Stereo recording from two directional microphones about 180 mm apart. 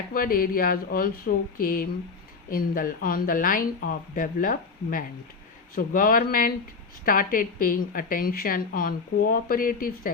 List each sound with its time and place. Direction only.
0.1 s a woman's voice: 55° left (ahead or behind)